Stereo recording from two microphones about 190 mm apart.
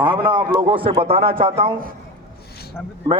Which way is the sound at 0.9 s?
30° right (ahead or behind).